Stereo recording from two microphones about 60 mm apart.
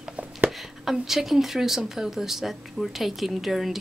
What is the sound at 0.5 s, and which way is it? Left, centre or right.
Speech, centre.